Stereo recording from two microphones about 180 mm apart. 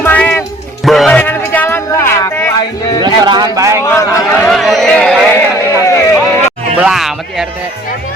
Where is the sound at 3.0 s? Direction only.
25° right (ahead or behind).